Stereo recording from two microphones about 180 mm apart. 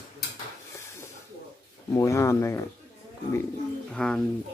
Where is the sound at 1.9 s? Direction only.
15° left (ahead or behind).